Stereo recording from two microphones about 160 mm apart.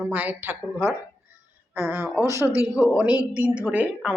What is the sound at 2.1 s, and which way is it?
A woman's voice, 15° right (ahead or behind).